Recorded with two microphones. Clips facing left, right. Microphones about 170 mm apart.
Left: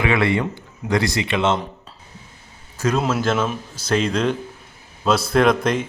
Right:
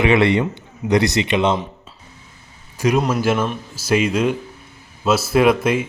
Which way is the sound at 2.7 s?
15° right (ahead or behind).